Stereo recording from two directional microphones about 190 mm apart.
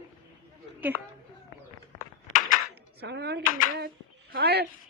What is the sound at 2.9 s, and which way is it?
Speech, 60° right (ahead or behind).